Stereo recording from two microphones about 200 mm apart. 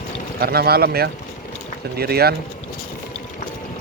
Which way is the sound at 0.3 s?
50° right (ahead or behind).